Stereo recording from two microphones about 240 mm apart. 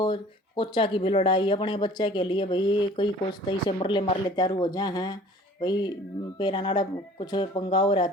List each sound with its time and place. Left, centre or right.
0.0 s speech: centre